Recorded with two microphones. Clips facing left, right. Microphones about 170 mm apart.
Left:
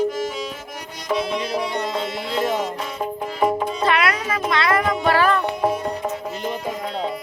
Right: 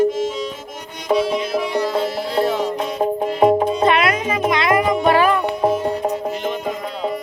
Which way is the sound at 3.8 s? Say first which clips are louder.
Right 4 dB; 20° right (ahead or behind).